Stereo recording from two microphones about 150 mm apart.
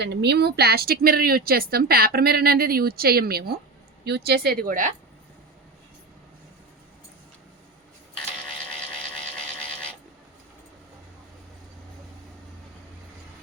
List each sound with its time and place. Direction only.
0.2 s a woman's voice: 90° right; by 4.9 s 70° right (ahead or behind)